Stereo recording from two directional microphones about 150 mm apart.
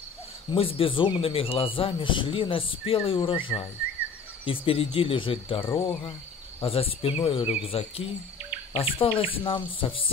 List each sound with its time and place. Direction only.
0.5 s a man's voice: 35° left (ahead or behind)